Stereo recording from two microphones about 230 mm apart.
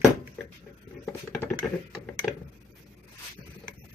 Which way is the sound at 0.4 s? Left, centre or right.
Centre.